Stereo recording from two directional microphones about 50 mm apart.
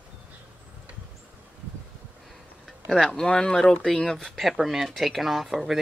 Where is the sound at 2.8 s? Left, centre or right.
Centre.